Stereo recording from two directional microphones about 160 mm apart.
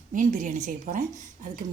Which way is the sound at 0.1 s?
55° right (ahead or behind).